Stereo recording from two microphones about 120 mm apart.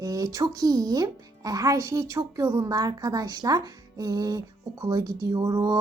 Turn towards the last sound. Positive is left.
turn(degrees=-25)  # may be behind; listen again after turning